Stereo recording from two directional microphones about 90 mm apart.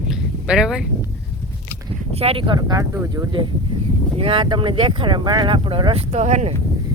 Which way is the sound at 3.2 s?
30° right (ahead or behind).